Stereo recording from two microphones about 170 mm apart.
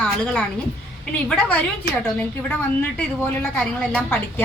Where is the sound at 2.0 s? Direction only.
10° left (ahead or behind).